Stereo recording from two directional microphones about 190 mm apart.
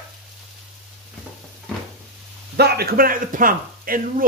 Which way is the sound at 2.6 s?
55° right (ahead or behind).